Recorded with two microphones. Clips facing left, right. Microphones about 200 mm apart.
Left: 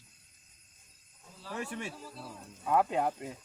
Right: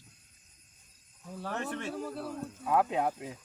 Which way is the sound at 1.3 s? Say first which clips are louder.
Right 3 dB; 60° right (ahead or behind).